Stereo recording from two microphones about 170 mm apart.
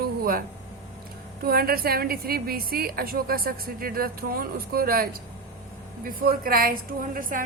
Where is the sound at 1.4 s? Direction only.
60° right (ahead or behind).